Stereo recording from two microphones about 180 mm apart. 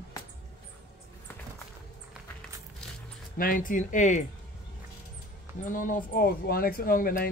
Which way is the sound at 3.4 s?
50° left (ahead or behind).